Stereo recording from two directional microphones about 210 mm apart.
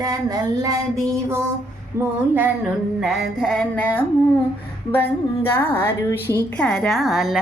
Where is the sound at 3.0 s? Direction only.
Centre (ahead or behind).